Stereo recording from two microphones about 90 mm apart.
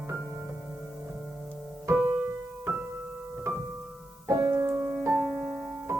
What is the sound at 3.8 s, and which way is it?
Music, 10° right (ahead or behind).